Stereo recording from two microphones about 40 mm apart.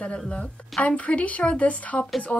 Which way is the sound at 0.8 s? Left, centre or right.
Left.